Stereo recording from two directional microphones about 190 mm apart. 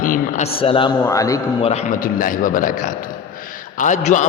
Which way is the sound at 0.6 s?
25° left (ahead or behind).